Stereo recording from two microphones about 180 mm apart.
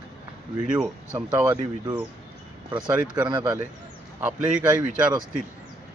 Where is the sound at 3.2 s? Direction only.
25° right (ahead or behind).